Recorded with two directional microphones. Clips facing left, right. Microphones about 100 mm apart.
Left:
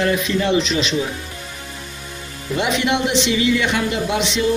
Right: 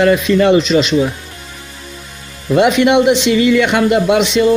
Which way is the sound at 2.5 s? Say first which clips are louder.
Right 9 dB; 65° right (ahead or behind).